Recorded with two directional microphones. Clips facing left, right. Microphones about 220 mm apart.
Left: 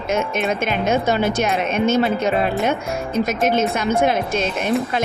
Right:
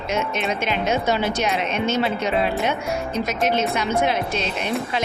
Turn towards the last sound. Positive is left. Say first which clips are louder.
# left 4 dB
turn(degrees=50)  # may be behind; listen again after turning